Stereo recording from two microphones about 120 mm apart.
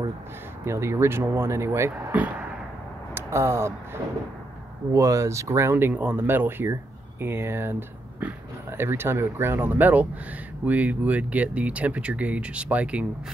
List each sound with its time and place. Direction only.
0.7 s speech: 20° right (ahead or behind)